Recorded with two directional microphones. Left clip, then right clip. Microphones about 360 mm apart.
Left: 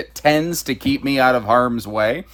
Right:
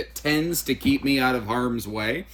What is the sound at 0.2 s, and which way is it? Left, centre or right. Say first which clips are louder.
Speech: left 8 dB; centre.